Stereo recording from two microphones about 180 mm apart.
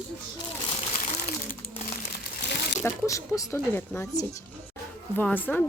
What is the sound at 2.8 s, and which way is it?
Speech, 15° left (ahead or behind).